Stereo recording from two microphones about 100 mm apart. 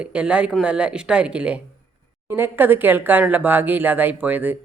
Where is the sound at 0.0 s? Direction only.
10° right (ahead or behind).